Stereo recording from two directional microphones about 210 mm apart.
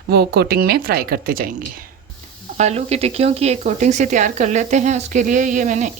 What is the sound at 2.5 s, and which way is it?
Speech, 30° right (ahead or behind).